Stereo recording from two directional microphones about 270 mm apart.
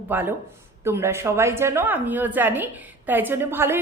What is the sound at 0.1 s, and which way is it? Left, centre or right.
A woman's voice, centre.